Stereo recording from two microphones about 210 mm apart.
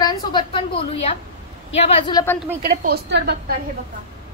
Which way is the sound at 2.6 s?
45° right (ahead or behind).